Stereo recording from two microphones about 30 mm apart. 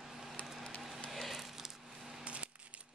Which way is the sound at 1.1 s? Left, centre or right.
Centre.